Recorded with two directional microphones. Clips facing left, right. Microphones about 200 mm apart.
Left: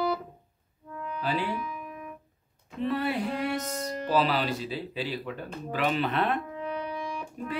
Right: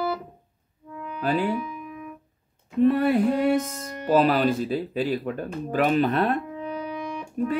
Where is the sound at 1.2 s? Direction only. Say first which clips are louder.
Right 6 dB; 50° right (ahead or behind).